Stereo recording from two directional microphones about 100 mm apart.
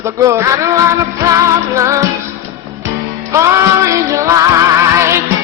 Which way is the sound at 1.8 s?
30° right (ahead or behind).